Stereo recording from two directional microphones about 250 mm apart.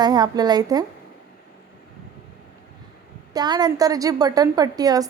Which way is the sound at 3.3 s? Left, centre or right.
Centre.